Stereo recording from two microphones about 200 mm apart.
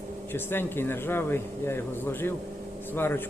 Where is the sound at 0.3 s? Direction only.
10° left (ahead or behind).